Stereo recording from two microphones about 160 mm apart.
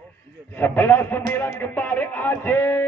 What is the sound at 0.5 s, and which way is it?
A man's voice, 15° left (ahead or behind).